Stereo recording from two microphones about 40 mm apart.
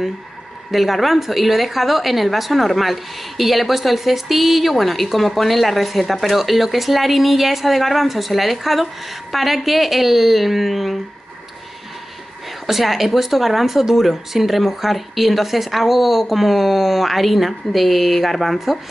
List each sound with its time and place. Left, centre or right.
0.7 s a woman's voice: centre
12.6 s a woman's voice: centre